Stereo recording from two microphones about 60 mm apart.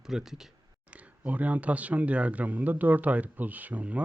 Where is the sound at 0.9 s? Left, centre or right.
Right.